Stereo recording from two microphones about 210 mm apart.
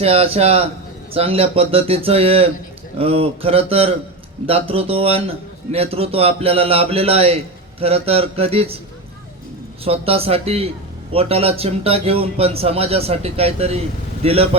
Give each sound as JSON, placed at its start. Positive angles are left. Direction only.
{"t": 0.0, "sound": "a man's voice", "side_deg": -25}
{"t": 9.8, "sound": "a man's voice", "side_deg": -30}